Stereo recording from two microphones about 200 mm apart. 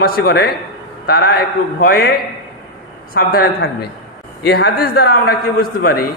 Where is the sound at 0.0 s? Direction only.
50° left (ahead or behind).